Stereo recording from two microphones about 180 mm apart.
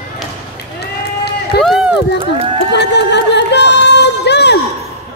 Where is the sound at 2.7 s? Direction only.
70° left (ahead or behind).